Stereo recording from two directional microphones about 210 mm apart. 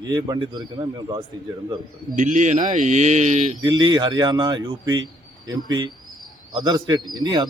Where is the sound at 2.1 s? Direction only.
35° right (ahead or behind).